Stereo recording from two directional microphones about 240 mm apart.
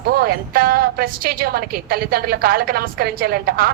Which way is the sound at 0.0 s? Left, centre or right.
Right.